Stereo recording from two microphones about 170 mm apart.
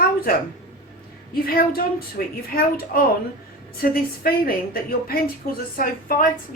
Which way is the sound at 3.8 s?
60° left (ahead or behind).